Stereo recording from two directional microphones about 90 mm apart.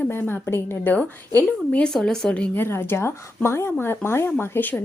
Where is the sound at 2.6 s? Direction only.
25° left (ahead or behind).